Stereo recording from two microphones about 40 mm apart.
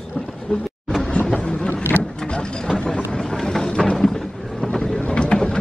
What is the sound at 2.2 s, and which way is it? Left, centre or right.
Mechanisms, left.